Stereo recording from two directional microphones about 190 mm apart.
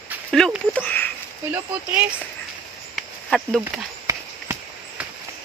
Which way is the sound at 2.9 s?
Centre (ahead or behind).